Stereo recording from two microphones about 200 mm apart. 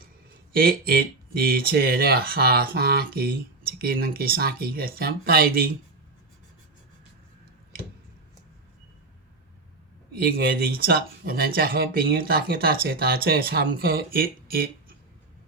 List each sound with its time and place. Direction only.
0.5 s speech: 50° right (ahead or behind)
10.2 s speech: 50° right (ahead or behind)